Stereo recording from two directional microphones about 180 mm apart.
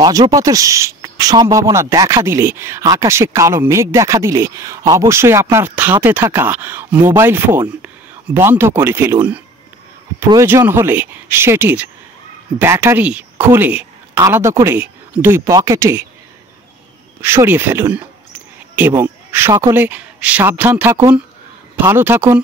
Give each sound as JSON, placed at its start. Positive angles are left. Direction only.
{"t": 0.0, "sound": "speech", "side_deg": -20}
{"t": 17.2, "sound": "a man's voice", "side_deg": -15}